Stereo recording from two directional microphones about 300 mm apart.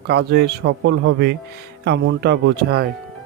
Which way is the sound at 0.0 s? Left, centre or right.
Right.